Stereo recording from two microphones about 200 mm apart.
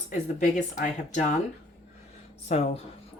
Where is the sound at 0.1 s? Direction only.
35° left (ahead or behind).